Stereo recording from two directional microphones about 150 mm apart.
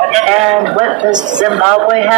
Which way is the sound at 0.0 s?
45° right (ahead or behind).